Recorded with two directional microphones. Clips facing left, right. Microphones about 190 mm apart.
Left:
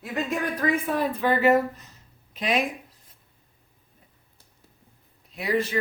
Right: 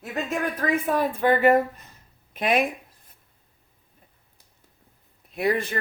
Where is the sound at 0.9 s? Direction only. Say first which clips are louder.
Right 2 dB; 50° right (ahead or behind).